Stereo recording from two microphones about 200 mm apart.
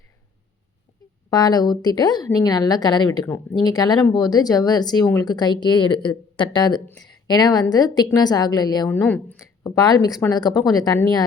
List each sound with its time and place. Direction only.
1.3 s a woman's voice: 20° left (ahead or behind)
9.0 s speech: 10° left (ahead or behind)